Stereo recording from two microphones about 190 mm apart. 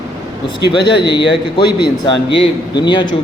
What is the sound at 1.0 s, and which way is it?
Speech, 25° left (ahead or behind).